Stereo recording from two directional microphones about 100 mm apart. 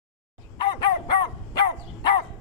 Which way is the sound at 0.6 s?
50° left (ahead or behind).